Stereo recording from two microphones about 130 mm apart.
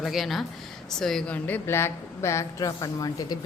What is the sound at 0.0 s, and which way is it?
Speech, centre (ahead or behind).